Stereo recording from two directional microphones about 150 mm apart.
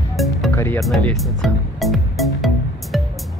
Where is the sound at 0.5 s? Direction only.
15° left (ahead or behind).